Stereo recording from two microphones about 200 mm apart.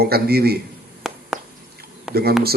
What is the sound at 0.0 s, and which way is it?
Speech, 50° right (ahead or behind).